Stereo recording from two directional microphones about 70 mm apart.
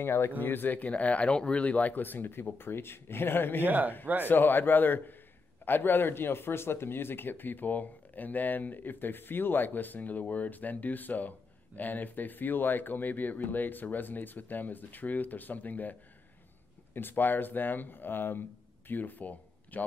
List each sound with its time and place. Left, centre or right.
0.0 s speech: left
3.6 s speech: right
4.3 s speech: left